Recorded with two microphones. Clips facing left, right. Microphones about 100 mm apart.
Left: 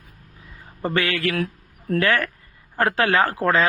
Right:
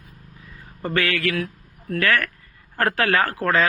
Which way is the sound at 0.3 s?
20° left (ahead or behind).